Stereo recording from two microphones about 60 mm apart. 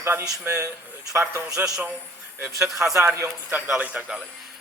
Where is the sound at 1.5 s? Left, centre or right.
Centre.